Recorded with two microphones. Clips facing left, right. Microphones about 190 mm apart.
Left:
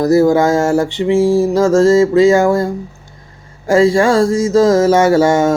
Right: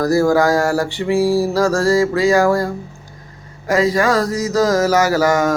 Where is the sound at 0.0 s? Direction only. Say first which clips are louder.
Left 4 dB; 20° left (ahead or behind).